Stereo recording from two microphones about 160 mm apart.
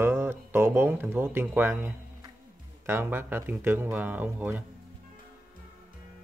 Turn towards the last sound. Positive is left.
turn(degrees=-10)  # may be behind; listen again after turning